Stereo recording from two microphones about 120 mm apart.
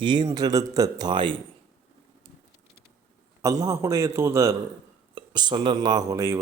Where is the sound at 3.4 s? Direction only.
30° right (ahead or behind).